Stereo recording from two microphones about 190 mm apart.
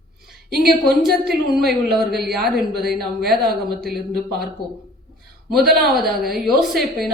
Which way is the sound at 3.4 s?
55° right (ahead or behind).